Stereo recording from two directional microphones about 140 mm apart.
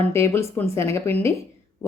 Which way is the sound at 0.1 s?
20° left (ahead or behind).